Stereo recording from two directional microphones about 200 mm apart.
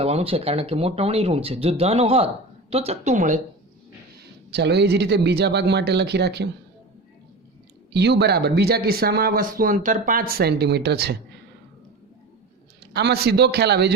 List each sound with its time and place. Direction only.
0.0 s speech: 30° right (ahead or behind)
4.5 s speech: 55° right (ahead or behind)
7.9 s speech: 55° right (ahead or behind)
12.9 s speech: 55° right (ahead or behind)